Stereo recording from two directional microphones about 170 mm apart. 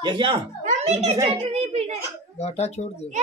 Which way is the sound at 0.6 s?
40° right (ahead or behind).